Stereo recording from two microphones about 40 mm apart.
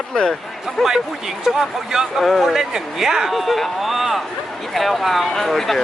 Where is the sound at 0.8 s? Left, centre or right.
Centre.